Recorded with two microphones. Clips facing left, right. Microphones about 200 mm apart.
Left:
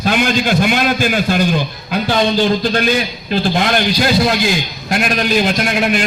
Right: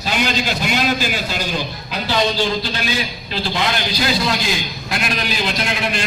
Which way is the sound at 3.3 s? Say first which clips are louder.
Left 7 dB; 50° left (ahead or behind).